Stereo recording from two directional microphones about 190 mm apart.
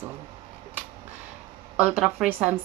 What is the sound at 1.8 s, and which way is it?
Speech, 5° right (ahead or behind).